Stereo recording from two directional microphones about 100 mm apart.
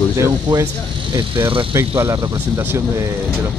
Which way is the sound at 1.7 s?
25° right (ahead or behind).